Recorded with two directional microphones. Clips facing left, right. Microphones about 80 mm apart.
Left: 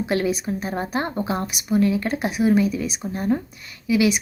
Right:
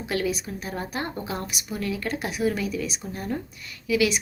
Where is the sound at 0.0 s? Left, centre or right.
Left.